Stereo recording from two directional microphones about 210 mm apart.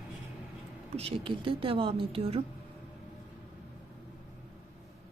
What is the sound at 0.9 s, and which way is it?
Speech, 30° right (ahead or behind).